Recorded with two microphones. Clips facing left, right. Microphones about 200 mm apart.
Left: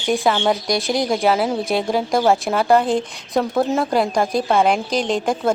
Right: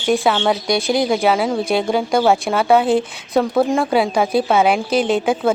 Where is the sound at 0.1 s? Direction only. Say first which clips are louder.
Right 2 dB; centre (ahead or behind).